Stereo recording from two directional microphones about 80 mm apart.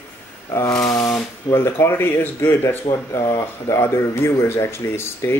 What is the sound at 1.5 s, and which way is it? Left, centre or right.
Speech, left.